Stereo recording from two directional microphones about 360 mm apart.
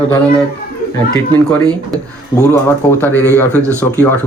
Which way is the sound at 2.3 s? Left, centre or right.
Centre.